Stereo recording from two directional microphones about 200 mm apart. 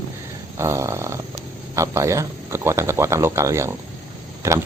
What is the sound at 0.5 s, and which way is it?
Speech, 15° right (ahead or behind).